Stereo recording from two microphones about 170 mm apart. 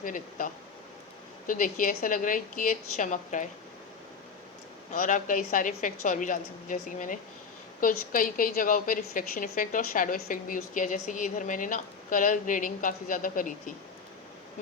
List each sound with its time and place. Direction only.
0.0 s a woman's voice: 50° left (ahead or behind)
4.9 s a woman's voice: 50° left (ahead or behind)